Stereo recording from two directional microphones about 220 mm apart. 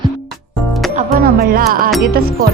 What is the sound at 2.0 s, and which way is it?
Music, 45° right (ahead or behind).